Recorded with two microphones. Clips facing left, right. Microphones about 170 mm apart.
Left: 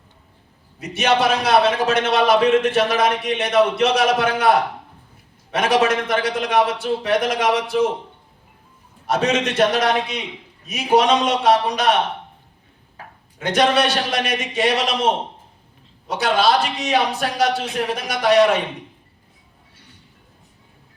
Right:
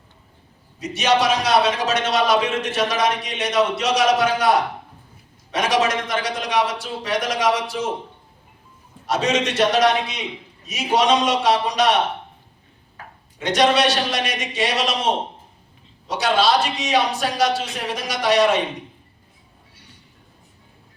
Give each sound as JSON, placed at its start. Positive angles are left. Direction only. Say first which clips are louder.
{"t": 0.8, "sound": "a man's voice", "louder": "left 1 dB", "side_deg": 55}
{"t": 9.0, "sound": "a man's voice", "louder": "left 1 dB", "side_deg": 55}
{"t": 13.4, "sound": "speech", "louder": "even", "side_deg": 55}
{"t": 16.0, "sound": "a man's voice", "louder": "left 1 dB", "side_deg": 55}